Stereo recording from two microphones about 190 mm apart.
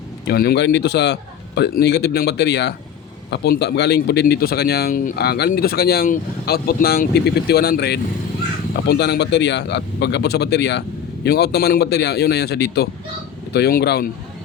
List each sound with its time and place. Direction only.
0.3 s speech: 55° left (ahead or behind)